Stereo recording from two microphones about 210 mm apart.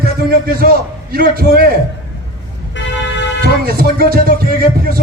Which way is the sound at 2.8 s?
60° left (ahead or behind).